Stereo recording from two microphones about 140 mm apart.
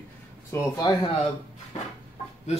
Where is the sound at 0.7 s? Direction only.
30° left (ahead or behind).